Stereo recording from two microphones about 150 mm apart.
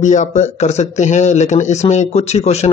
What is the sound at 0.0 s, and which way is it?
Speech, 55° left (ahead or behind).